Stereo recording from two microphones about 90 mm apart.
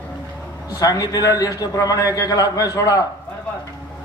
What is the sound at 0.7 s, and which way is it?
A man's voice, 45° left (ahead or behind).